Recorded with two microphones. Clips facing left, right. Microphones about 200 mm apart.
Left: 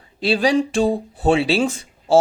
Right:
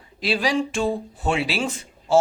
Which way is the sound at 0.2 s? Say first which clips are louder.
Left 5 dB; 30° left (ahead or behind).